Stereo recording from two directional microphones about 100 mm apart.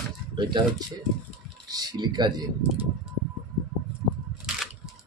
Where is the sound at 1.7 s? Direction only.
40° right (ahead or behind).